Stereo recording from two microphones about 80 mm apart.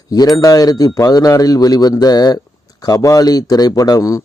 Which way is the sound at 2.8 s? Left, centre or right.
Left.